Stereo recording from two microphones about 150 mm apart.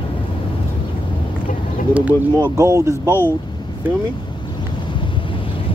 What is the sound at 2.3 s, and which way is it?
Speech, 20° right (ahead or behind).